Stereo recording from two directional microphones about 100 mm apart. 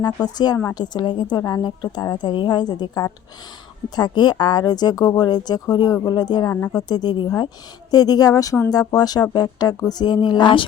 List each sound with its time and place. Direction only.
0.0 s speech: 45° left (ahead or behind)
1.4 s speech: 40° left (ahead or behind)